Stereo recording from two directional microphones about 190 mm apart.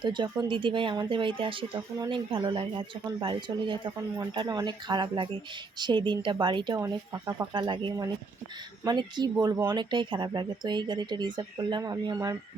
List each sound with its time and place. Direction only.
0.0 s speech: 25° right (ahead or behind)